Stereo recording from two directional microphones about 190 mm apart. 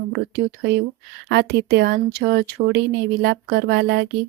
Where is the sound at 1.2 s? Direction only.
65° right (ahead or behind).